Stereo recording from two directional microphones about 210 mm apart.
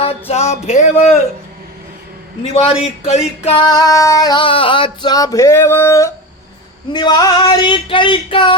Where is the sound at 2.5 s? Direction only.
30° left (ahead or behind).